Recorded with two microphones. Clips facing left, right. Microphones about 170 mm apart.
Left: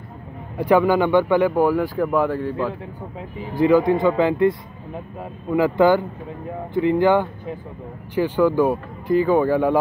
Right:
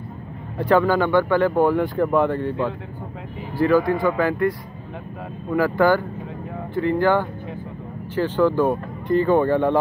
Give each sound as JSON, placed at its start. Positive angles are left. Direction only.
{"t": 0.6, "sound": "speech", "side_deg": 15}
{"t": 1.5, "sound": "speech", "side_deg": 5}
{"t": 3.5, "sound": "speech", "side_deg": 20}